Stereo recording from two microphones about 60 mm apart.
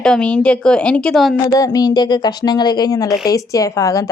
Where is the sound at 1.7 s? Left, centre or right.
Left.